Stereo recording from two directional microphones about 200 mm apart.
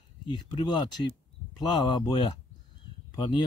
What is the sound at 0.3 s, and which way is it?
Speech, 20° left (ahead or behind).